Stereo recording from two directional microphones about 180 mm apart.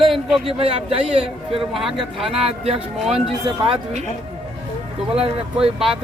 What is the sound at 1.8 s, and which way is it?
Speech, centre (ahead or behind).